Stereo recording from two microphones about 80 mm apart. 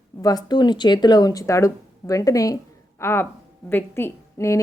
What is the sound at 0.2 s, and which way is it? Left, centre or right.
Speech, left.